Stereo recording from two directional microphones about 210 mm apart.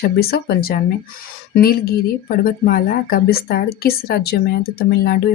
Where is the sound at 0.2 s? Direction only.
45° left (ahead or behind).